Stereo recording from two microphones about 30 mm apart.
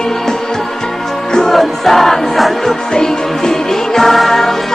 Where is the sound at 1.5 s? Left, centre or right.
Centre.